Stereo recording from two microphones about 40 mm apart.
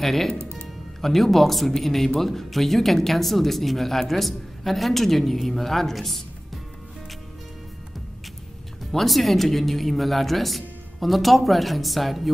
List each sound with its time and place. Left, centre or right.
0.0 s a woman's voice: centre
0.4 s music: right
1.0 s a woman's voice: centre
8.9 s a woman's voice: centre